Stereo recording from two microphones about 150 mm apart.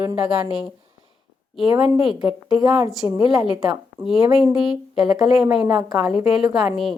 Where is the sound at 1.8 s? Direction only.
5° right (ahead or behind).